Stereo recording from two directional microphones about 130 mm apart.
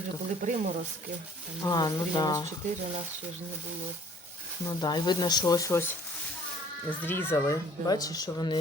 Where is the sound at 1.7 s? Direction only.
30° left (ahead or behind).